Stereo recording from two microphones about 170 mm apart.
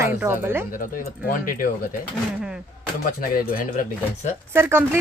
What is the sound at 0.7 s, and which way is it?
Speech, 55° left (ahead or behind).